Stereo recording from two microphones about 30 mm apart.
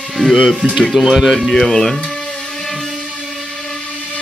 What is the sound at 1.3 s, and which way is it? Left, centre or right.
Speech, centre.